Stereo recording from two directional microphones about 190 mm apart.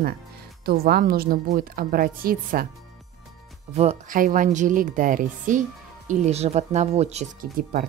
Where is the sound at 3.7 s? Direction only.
40° right (ahead or behind).